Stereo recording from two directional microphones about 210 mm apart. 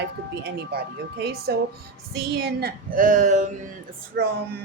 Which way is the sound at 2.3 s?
45° right (ahead or behind).